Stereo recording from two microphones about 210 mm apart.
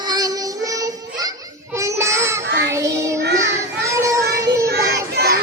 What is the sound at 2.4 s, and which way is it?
Child singing, 55° right (ahead or behind).